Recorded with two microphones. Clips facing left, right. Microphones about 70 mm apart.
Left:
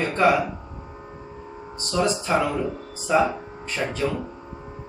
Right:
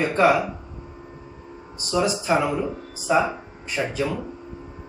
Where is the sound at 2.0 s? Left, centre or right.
Centre.